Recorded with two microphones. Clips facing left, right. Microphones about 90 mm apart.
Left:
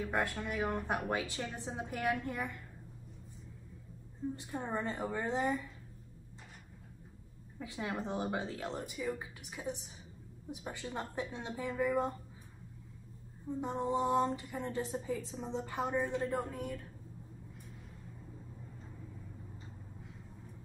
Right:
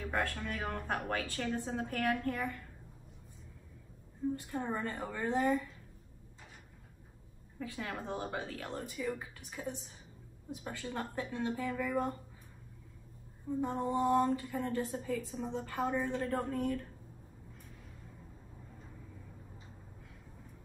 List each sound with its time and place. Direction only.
0.0 s speech: 15° left (ahead or behind)
4.4 s a woman's voice: 15° left (ahead or behind)
7.5 s a woman's voice: 20° left (ahead or behind)
13.5 s a woman's voice: 20° left (ahead or behind)